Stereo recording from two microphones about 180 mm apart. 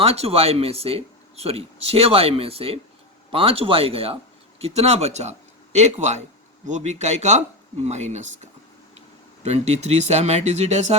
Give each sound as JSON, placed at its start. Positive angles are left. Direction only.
{"t": 0.0, "sound": "speech", "side_deg": -35}